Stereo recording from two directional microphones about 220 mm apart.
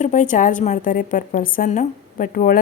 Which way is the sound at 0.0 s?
35° left (ahead or behind).